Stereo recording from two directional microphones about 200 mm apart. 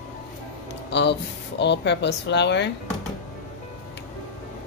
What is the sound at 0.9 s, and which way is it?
Speech, 60° left (ahead or behind).